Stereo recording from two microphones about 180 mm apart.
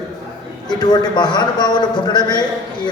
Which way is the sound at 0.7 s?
25° left (ahead or behind).